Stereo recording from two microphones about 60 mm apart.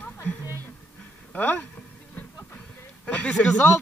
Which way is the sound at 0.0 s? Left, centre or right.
Left.